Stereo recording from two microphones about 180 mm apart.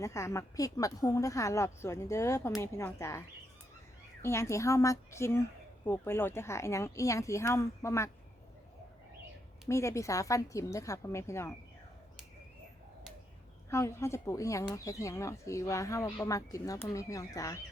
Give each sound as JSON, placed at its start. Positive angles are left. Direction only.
{"t": 0.0, "sound": "speech", "side_deg": 15}
{"t": 9.6, "sound": "speech", "side_deg": 15}
{"t": 13.7, "sound": "speech", "side_deg": 15}